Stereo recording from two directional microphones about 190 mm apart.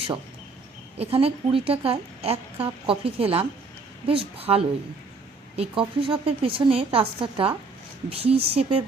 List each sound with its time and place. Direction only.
0.9 s speech: 30° right (ahead or behind)